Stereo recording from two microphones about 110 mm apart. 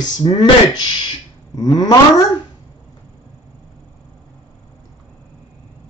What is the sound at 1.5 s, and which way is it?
Speech, 40° left (ahead or behind).